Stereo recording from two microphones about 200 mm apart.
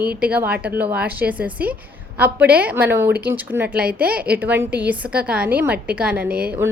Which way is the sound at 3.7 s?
50° right (ahead or behind).